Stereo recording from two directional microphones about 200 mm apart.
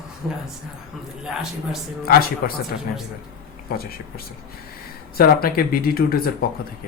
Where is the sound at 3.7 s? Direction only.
50° left (ahead or behind).